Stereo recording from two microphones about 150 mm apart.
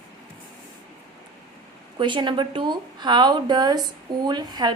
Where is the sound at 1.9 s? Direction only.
30° right (ahead or behind).